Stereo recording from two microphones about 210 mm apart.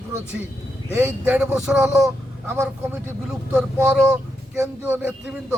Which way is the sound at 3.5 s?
5° right (ahead or behind).